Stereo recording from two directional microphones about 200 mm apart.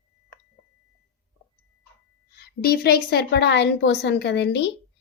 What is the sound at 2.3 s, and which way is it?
A woman's voice, 50° left (ahead or behind).